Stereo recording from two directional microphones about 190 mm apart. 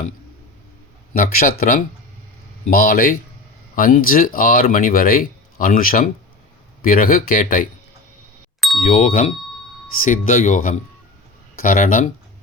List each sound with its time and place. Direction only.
1.1 s speech: 50° left (ahead or behind)
8.9 s speech: 40° left (ahead or behind)